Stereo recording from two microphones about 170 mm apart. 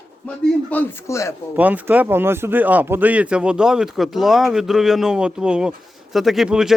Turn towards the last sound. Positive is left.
turn(degrees=-5)  # may be behind; listen again after turning